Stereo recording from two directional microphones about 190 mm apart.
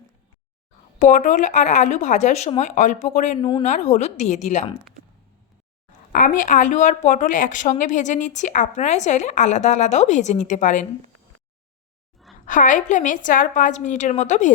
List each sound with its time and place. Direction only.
0.9 s a woman's voice: 40° left (ahead or behind)
3.4 s speech: 25° left (ahead or behind)
3.7 s a woman's voice: 40° left (ahead or behind)
6.1 s a woman's voice: 45° left (ahead or behind)
12.5 s a woman's voice: 45° left (ahead or behind)